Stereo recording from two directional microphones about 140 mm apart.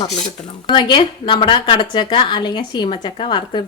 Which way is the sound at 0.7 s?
35° left (ahead or behind).